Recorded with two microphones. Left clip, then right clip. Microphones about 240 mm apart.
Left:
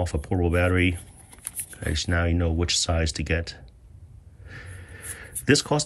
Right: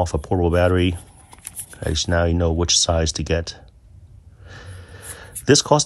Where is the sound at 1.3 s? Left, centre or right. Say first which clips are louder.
Right 2 dB; centre.